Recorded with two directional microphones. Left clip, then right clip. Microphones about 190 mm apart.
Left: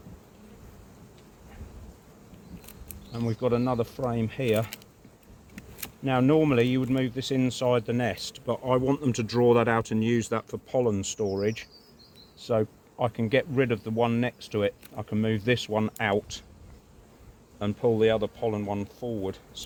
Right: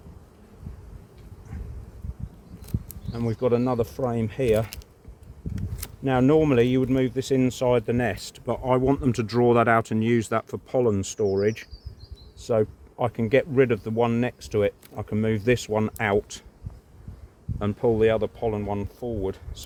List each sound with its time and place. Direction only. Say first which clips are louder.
3.1 s speech: right 4 dB; 55° right (ahead or behind)
6.1 s speech: right 3 dB; 60° right (ahead or behind)
17.6 s speech: right 2 dB; 70° right (ahead or behind)